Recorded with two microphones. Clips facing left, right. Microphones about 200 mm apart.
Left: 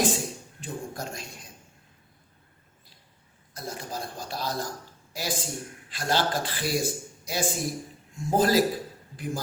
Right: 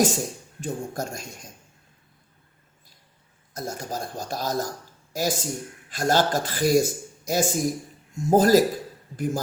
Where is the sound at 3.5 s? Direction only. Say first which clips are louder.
Right 4 dB; 45° right (ahead or behind).